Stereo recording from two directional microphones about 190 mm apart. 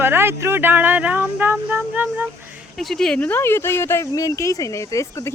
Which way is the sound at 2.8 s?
5° left (ahead or behind).